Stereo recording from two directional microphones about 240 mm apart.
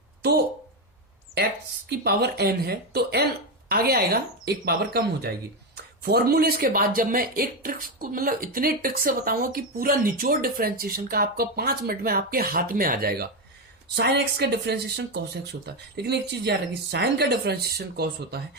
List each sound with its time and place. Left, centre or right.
1.9 s speech: right